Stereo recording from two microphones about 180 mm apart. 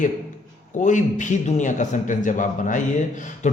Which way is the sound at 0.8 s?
45° left (ahead or behind).